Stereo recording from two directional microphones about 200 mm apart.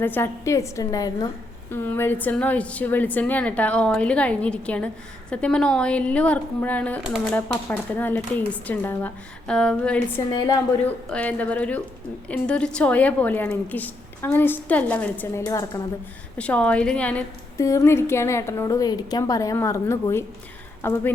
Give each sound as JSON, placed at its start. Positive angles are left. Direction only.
{"t": 0.0, "sound": "a woman's voice", "side_deg": 10}
{"t": 7.3, "sound": "a woman's voice", "side_deg": 10}